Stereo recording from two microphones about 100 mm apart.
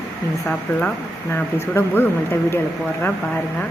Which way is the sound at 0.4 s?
10° left (ahead or behind).